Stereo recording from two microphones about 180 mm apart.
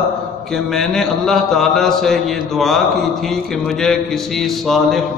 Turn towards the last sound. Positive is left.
turn(degrees=0)  # may be behind; listen again after turning